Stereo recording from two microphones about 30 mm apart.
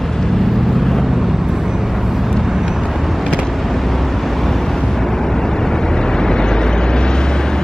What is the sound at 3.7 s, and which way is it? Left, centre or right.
Vehicle, centre.